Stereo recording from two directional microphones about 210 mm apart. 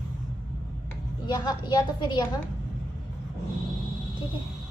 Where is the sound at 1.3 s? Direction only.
20° left (ahead or behind).